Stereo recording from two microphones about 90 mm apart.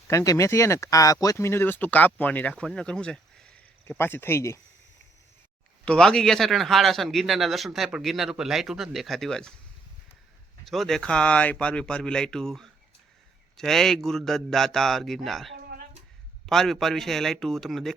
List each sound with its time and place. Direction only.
0.1 s speech: 35° left (ahead or behind)
1.5 s speech: 25° left (ahead or behind); by 3.5 s 10° left (ahead or behind)
3.8 s speech: 25° left (ahead or behind)
5.8 s a man's voice: 10° left (ahead or behind)
10.7 s a man's voice: centre (ahead or behind)